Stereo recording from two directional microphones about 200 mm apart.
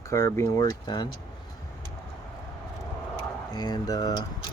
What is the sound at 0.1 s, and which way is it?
Speech, 15° left (ahead or behind).